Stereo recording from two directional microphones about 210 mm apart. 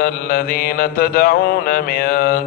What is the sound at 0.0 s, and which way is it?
Mantra, 45° left (ahead or behind).